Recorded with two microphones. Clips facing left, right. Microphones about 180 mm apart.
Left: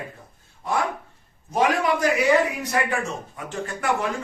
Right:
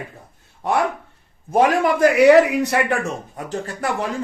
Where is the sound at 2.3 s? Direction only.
75° right (ahead or behind).